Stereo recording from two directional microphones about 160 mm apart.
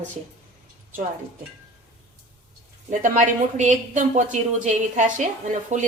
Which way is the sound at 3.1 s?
50° right (ahead or behind).